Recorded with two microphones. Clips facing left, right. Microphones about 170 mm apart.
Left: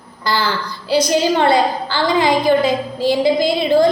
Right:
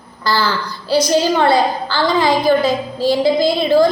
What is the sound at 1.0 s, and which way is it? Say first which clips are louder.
A woman's voice: right 1 dB; 20° left (ahead or behind).